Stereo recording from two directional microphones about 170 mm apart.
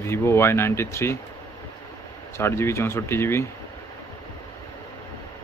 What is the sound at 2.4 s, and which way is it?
Speech, 15° left (ahead or behind).